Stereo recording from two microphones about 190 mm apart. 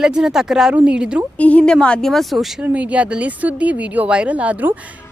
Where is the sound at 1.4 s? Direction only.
5° left (ahead or behind).